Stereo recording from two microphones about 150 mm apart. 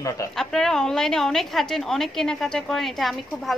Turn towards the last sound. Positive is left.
turn(degrees=0)  # may be behind; listen again after turning